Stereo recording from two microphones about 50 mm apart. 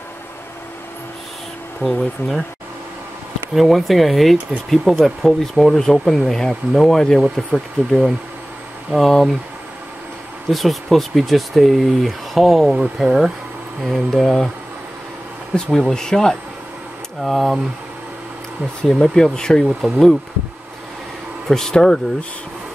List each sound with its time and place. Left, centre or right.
2.0 s speech: centre
3.5 s speech: centre
8.9 s speech: centre
10.5 s speech: centre
13.8 s speech: centre
15.5 s speech: centre
17.2 s speech: centre
18.8 s speech: centre
21.5 s speech: centre